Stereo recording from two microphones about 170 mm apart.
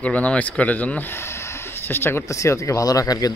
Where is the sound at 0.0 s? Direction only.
10° left (ahead or behind).